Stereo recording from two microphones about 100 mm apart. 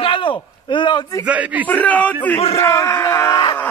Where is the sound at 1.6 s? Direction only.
15° left (ahead or behind).